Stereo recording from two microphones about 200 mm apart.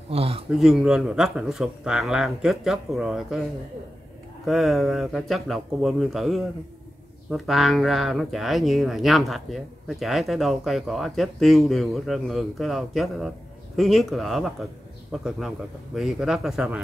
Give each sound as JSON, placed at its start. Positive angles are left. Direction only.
{"t": 0.1, "sound": "speech", "side_deg": -30}
{"t": 0.5, "sound": "speech", "side_deg": -5}
{"t": 4.5, "sound": "speech", "side_deg": 0}